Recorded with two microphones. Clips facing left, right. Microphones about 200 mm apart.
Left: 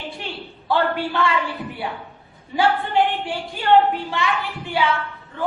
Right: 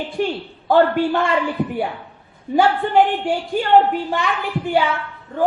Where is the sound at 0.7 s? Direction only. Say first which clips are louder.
Right 6 dB; 45° right (ahead or behind).